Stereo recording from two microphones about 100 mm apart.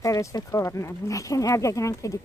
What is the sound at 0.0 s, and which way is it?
Speech, 35° left (ahead or behind).